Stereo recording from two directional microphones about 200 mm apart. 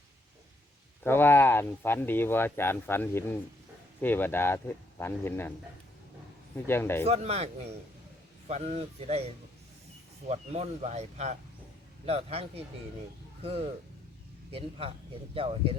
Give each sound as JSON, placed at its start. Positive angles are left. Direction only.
{"t": 1.0, "sound": "speech", "side_deg": 10}
{"t": 6.7, "sound": "speech", "side_deg": 10}
{"t": 7.0, "sound": "a man's voice", "side_deg": -30}